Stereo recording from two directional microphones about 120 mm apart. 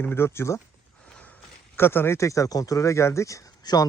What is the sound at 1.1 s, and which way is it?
Speech, 10° left (ahead or behind).